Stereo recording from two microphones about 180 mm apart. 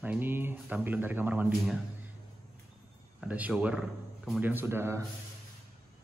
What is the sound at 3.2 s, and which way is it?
Speech, 10° right (ahead or behind).